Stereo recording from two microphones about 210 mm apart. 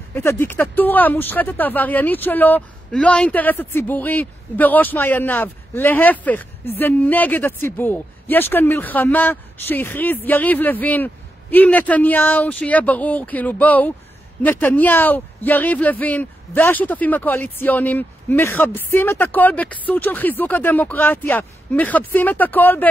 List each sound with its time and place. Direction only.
0.1 s speech: 10° left (ahead or behind)